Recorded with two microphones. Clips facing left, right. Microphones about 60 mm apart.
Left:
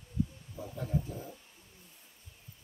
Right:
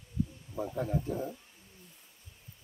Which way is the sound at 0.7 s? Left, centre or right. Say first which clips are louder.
Right 2 dB; right.